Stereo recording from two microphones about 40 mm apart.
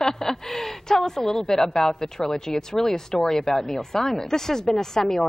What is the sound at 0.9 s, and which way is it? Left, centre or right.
A woman's voice, centre.